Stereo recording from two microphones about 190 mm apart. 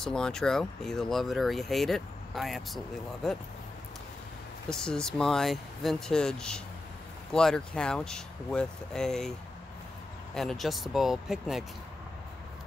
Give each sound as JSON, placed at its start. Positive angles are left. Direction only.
{"t": 0.0, "sound": "speech", "side_deg": 5}
{"t": 4.6, "sound": "speech", "side_deg": 5}
{"t": 10.3, "sound": "speech", "side_deg": 0}